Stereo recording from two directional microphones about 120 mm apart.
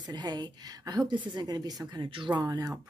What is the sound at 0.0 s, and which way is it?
Speech, 35° right (ahead or behind).